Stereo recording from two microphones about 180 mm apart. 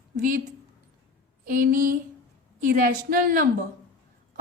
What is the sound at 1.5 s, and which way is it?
A woman's voice, 50° right (ahead or behind).